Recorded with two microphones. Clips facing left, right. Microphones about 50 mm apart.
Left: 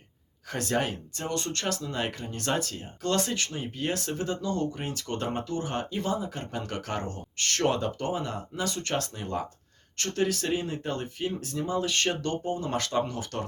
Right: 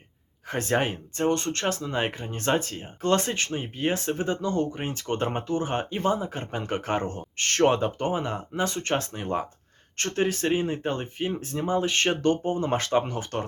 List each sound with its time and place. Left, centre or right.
0.4 s speech: right